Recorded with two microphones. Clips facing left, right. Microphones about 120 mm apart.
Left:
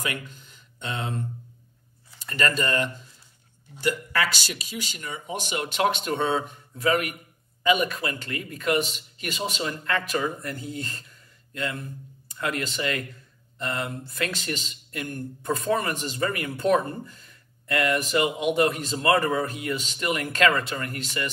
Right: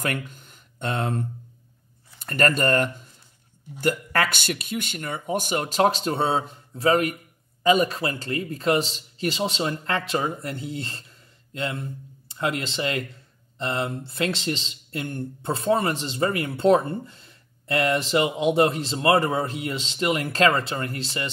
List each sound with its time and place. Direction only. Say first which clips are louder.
0.0 s speech: right 4 dB; 50° right (ahead or behind); by 21.3 s 30° right (ahead or behind)